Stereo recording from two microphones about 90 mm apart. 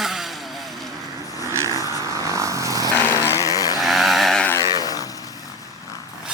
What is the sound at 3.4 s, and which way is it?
Chainsaw, 40° left (ahead or behind).